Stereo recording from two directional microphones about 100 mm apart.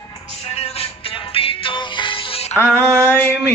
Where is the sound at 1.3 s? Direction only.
65° left (ahead or behind).